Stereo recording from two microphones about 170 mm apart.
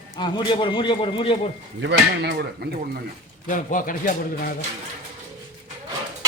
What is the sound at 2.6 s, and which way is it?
Speech, 70° right (ahead or behind).